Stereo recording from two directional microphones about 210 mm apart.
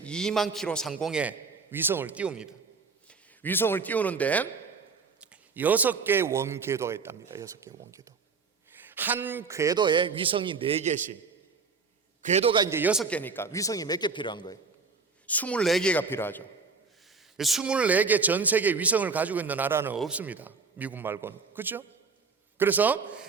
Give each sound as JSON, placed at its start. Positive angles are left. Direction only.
{"t": 0.0, "sound": "a man's voice", "side_deg": 5}
{"t": 3.1, "sound": "speech", "side_deg": 10}
{"t": 5.2, "sound": "a man's voice", "side_deg": -5}
{"t": 12.2, "sound": "a man's voice", "side_deg": -30}
{"t": 13.1, "sound": "a man's voice", "side_deg": 5}
{"t": 15.3, "sound": "a man's voice", "side_deg": 5}
{"t": 17.3, "sound": "a man's voice", "side_deg": 0}